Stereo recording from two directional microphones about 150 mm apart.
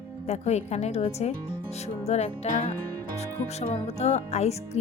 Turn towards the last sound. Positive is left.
turn(degrees=45)  # may be behind; listen again after turning